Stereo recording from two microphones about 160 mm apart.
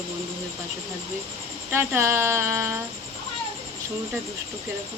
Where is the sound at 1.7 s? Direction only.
15° right (ahead or behind).